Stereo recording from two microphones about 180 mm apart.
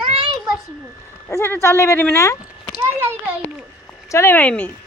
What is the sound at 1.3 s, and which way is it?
Speech, 15° left (ahead or behind).